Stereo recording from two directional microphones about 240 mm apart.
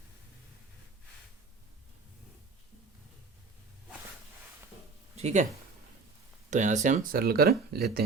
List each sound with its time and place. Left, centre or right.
5.1 s speech: right
6.5 s speech: right